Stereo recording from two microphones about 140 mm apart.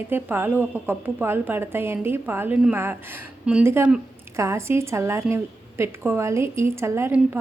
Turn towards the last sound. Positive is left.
turn(degrees=-15)  # may be behind; listen again after turning